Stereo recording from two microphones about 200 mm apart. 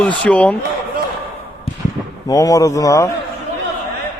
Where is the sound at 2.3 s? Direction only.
15° left (ahead or behind).